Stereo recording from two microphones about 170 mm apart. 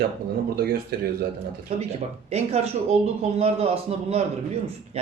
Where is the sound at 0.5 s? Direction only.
65° right (ahead or behind).